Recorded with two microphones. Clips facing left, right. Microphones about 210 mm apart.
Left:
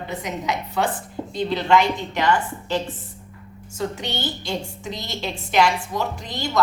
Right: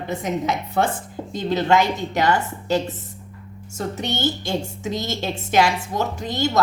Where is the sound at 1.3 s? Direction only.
45° right (ahead or behind).